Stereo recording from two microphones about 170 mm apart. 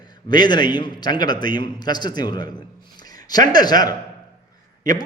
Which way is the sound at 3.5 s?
25° left (ahead or behind).